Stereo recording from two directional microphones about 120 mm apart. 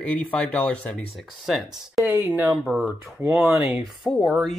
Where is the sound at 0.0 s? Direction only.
10° left (ahead or behind).